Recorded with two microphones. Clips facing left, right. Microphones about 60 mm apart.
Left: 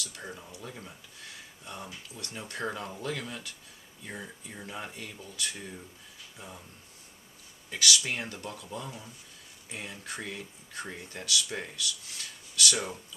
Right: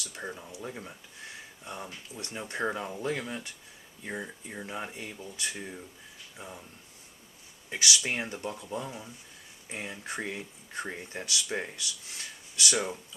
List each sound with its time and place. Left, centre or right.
0.0 s speech: right
7.7 s speech: right